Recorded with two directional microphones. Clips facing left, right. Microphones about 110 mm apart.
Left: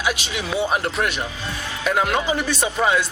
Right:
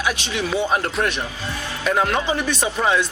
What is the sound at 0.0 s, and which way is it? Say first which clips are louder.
Speech: right 1 dB; 15° left (ahead or behind).